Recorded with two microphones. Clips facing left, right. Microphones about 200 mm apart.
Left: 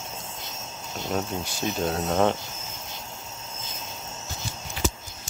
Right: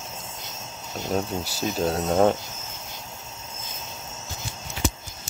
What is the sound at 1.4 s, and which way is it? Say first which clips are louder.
Speech: right 2 dB; 40° right (ahead or behind).